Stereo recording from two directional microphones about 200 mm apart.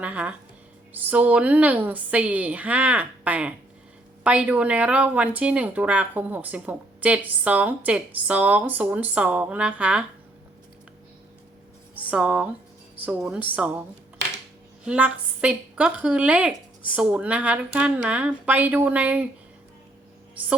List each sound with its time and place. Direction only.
0.0 s speech: 5° right (ahead or behind)
12.1 s a woman's voice: 5° right (ahead or behind)
14.8 s a woman's voice: 5° right (ahead or behind)
20.4 s speech: 10° right (ahead or behind)